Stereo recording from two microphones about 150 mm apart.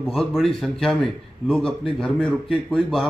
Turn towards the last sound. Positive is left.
turn(degrees=5)  # may be behind; listen again after turning